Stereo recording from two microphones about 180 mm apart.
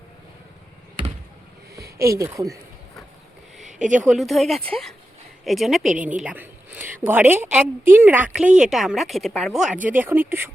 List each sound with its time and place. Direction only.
2.0 s a woman's voice: 15° right (ahead or behind)
3.6 s a sound: 40° right (ahead or behind)
4.0 s a woman's voice: centre (ahead or behind)
9.6 s speech: 50° right (ahead or behind)
9.9 s a woman's voice: 10° right (ahead or behind)